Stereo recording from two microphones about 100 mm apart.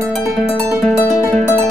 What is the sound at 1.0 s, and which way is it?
Music, 30° left (ahead or behind).